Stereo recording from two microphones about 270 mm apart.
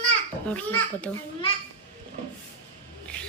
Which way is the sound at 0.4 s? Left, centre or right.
Centre.